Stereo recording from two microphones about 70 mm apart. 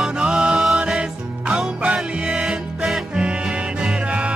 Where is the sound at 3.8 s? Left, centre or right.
Centre.